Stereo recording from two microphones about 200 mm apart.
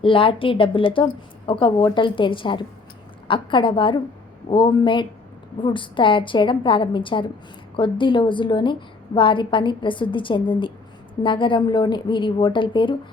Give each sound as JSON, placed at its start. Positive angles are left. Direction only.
{"t": 0.0, "sound": "a woman's voice", "side_deg": 25}